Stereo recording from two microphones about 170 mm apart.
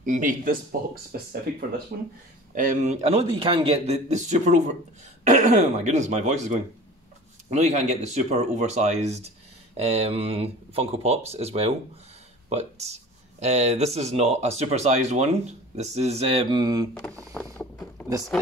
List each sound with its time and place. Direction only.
0.0 s speech: 50° right (ahead or behind)
1.9 s speech: 60° right (ahead or behind)
2.5 s speech: 45° right (ahead or behind); by 16.9 s 25° right (ahead or behind)